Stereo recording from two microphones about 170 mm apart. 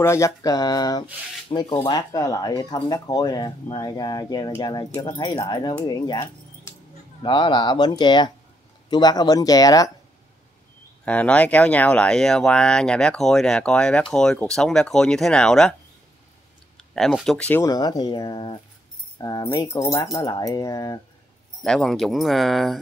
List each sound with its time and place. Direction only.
0.0 s speech: 15° left (ahead or behind)
11.1 s speech: 10° left (ahead or behind)
16.7 s speech: centre (ahead or behind)
17.6 s speech: 25° left (ahead or behind)
21.6 s speech: 5° left (ahead or behind)